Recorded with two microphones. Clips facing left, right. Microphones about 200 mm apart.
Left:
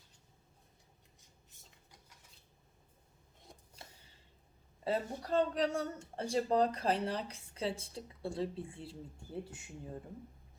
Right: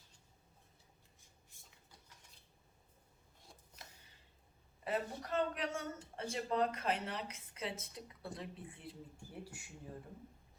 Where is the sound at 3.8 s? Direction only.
30° left (ahead or behind).